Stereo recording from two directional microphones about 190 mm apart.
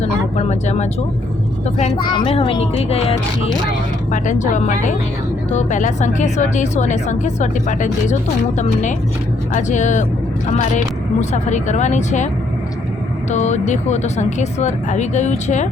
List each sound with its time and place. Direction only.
0.0 s a sound: 35° left (ahead or behind)
2.0 s a woman's voice: 25° left (ahead or behind)
13.3 s a woman's voice: 35° left (ahead or behind)